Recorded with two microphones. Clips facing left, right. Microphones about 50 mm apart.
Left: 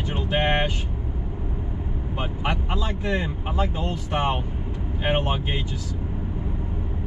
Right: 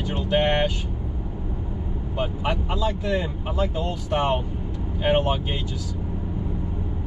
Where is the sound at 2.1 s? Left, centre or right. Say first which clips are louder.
Right 2 dB; centre.